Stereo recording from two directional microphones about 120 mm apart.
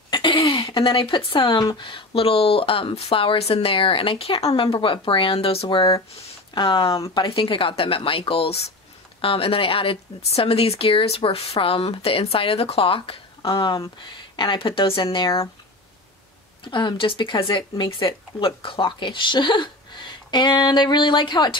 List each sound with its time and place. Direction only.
0.1 s speech: 40° left (ahead or behind)
6.5 s speech: 40° left (ahead or behind)
16.6 s speech: 40° left (ahead or behind)